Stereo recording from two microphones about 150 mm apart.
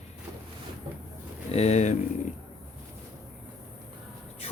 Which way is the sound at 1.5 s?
45° left (ahead or behind).